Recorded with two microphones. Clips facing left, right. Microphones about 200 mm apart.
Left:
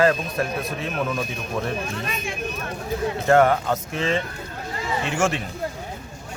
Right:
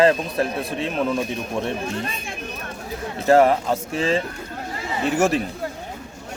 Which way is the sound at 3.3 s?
30° right (ahead or behind).